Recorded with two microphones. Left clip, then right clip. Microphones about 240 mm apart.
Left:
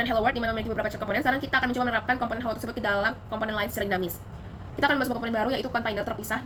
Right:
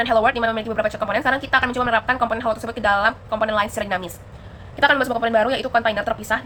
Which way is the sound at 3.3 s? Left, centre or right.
Right.